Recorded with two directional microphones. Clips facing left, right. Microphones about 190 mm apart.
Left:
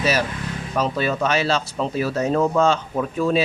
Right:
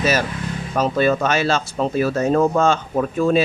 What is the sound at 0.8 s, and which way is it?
Speech, 50° right (ahead or behind).